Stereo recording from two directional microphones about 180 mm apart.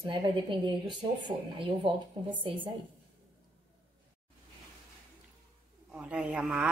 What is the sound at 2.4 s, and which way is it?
Speech, 30° right (ahead or behind).